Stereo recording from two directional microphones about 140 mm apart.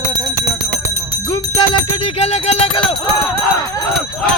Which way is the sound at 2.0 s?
50° left (ahead or behind).